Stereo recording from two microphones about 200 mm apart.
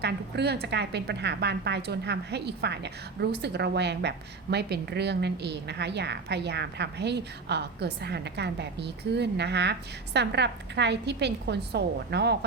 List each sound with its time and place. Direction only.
0.0 s a woman's voice: 55° right (ahead or behind)